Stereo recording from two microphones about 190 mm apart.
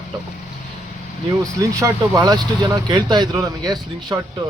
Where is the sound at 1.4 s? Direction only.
15° right (ahead or behind).